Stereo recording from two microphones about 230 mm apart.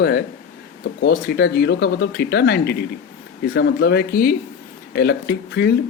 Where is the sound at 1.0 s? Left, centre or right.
Left.